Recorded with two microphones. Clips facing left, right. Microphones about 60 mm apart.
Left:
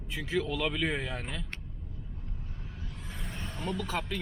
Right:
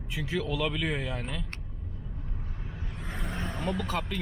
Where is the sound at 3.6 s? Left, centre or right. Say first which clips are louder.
Right 1 dB; centre.